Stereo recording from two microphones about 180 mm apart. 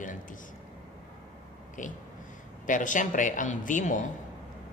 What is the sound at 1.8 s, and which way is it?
A man's voice, 45° left (ahead or behind).